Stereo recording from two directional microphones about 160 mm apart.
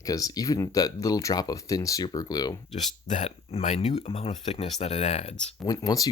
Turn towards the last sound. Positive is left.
turn(degrees=25)  # may be behind; listen again after turning